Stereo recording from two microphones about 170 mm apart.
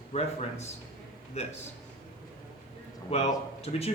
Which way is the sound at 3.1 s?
40° left (ahead or behind).